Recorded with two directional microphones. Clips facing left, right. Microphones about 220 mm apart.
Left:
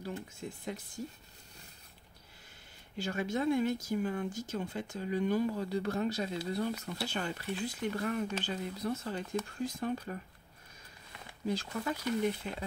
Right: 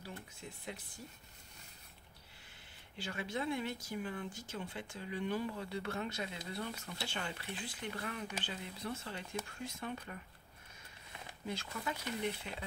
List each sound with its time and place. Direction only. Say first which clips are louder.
0.0 s speech: left 8 dB; 45° left (ahead or behind)
3.0 s speech: left 7 dB; 45° left (ahead or behind)
11.4 s speech: left 7 dB; 40° left (ahead or behind)